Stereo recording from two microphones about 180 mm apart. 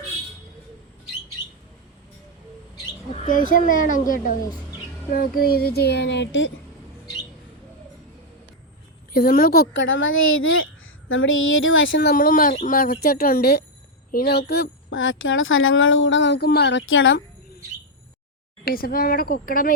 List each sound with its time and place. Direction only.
3.2 s a woman's voice: 50° left (ahead or behind); by 6.5 s 85° left
9.1 s speech: 55° left (ahead or behind)
9.7 s speech: 90° left
12.1 s a woman's voice: 50° left (ahead or behind); by 17.2 s 90° left
18.6 s a woman's voice: 55° left (ahead or behind)